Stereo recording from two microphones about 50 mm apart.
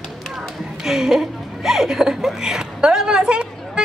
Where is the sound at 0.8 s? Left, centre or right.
Centre.